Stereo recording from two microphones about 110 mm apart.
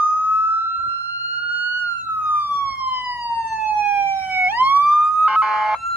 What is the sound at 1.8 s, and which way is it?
Emergency vehicle, 20° right (ahead or behind).